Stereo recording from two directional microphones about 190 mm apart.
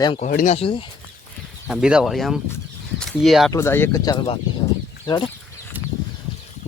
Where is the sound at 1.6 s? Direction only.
5° right (ahead or behind).